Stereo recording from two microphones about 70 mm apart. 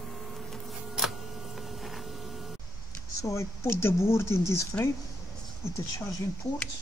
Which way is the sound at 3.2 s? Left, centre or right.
Left.